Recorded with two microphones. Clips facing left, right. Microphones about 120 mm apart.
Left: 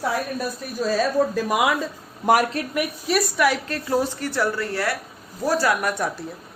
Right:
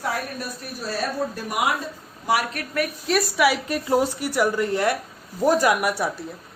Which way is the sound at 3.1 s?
Centre (ahead or behind).